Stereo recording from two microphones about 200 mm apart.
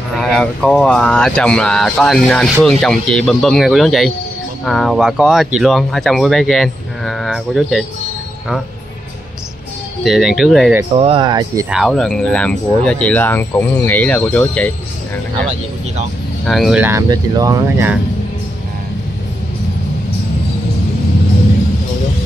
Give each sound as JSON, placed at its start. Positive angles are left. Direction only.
{"t": 0.2, "sound": "speech", "side_deg": 0}
{"t": 10.0, "sound": "speech", "side_deg": 0}
{"t": 11.0, "sound": "speech", "side_deg": -25}
{"t": 11.7, "sound": "speech", "side_deg": 0}
{"t": 16.4, "sound": "speech", "side_deg": 0}
{"t": 16.8, "sound": "speech", "side_deg": -15}